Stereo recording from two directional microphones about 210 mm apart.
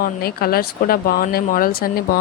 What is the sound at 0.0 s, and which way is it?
A woman's voice, 45° left (ahead or behind).